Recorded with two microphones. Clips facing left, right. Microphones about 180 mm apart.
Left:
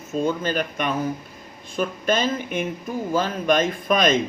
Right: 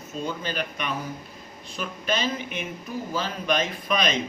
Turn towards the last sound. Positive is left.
turn(degrees=45)  # may be behind; listen again after turning